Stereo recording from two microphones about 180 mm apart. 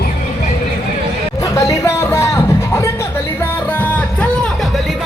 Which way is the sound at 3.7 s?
10° left (ahead or behind).